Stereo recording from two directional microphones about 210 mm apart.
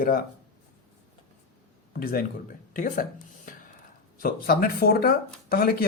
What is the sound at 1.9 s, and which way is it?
Speech, 45° left (ahead or behind).